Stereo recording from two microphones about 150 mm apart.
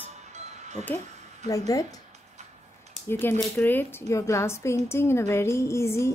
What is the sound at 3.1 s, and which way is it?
A woman's voice, 15° left (ahead or behind).